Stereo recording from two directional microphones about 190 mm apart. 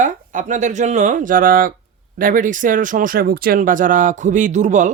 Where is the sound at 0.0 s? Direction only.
40° right (ahead or behind).